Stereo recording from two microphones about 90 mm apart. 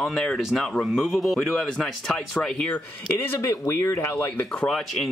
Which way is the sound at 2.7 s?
25° left (ahead or behind).